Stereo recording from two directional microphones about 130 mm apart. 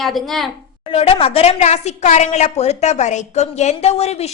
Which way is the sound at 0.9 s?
45° left (ahead or behind).